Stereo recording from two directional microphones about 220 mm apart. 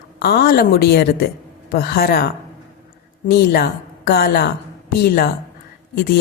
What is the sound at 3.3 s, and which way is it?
Speech, 45° left (ahead or behind).